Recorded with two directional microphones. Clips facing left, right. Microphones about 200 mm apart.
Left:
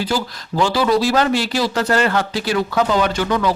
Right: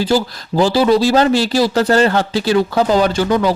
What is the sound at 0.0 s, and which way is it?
Speech, 30° right (ahead or behind).